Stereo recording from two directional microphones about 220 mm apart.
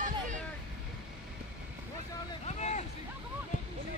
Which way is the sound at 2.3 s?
30° left (ahead or behind).